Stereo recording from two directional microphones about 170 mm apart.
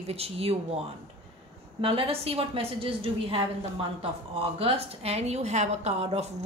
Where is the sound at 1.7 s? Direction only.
35° right (ahead or behind).